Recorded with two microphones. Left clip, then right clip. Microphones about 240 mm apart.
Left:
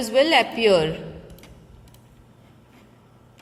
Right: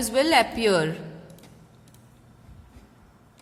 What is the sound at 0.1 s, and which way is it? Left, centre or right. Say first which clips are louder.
Speech: left 3 dB; right.